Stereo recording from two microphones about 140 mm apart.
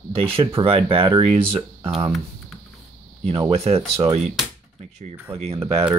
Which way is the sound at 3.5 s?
50° right (ahead or behind).